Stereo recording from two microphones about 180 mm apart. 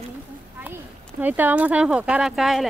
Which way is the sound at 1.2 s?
10° right (ahead or behind).